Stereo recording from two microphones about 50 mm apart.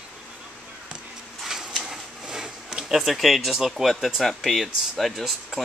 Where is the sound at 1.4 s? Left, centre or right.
Centre.